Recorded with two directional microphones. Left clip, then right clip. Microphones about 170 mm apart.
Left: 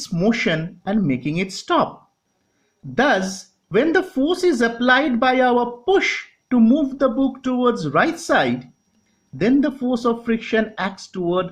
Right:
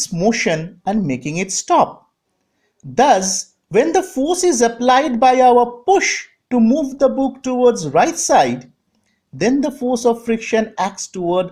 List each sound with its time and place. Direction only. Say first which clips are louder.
0.0 s speech: right 3 dB; 15° right (ahead or behind)
3.0 s speech: right 5 dB; 20° right (ahead or behind)